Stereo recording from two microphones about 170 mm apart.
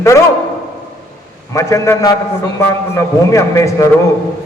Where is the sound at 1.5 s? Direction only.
20° left (ahead or behind).